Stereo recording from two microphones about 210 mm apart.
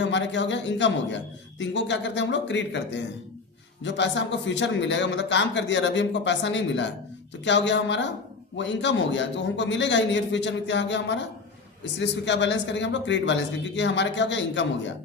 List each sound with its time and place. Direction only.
0.0 s a man's voice: 60° left (ahead or behind)